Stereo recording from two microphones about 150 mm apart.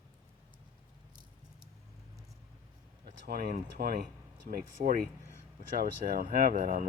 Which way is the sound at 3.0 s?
80° right.